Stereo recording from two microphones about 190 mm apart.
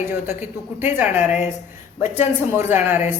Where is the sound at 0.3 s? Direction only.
10° right (ahead or behind).